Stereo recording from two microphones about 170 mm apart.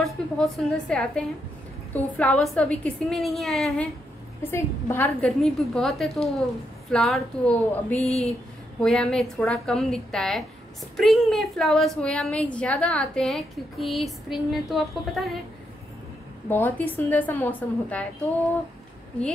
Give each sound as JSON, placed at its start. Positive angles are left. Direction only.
{"t": 0.0, "sound": "a woman's voice", "side_deg": 5}
{"t": 4.4, "sound": "a woman's voice", "side_deg": 15}
{"t": 8.0, "sound": "speech", "side_deg": 35}
{"t": 8.8, "sound": "a woman's voice", "side_deg": 5}
{"t": 16.4, "sound": "a woman's voice", "side_deg": 10}